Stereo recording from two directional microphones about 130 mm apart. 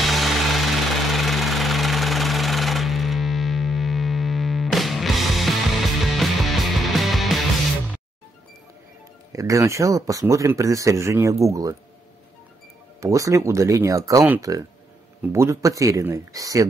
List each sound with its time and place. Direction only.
0.0 s a sound: centre (ahead or behind)
6.1 s music: centre (ahead or behind)
9.3 s speech: 25° right (ahead or behind)
13.0 s speech: 25° right (ahead or behind)